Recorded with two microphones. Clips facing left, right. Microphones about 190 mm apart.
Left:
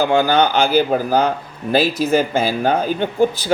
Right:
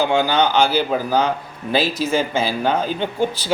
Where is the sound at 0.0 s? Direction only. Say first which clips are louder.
Left 2 dB; 45° left (ahead or behind).